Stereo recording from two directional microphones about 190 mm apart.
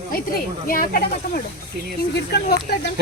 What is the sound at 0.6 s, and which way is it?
Speech, 50° left (ahead or behind).